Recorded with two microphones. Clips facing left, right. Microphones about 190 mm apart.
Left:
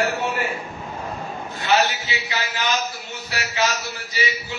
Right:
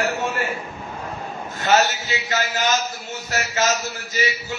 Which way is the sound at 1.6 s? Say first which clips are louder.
Right 2 dB; 45° right (ahead or behind).